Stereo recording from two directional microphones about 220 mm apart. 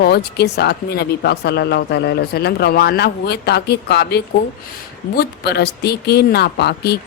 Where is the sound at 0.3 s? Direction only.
50° left (ahead or behind).